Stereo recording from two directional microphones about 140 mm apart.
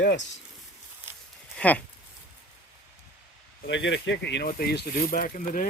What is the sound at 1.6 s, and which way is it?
Speech, 10° left (ahead or behind).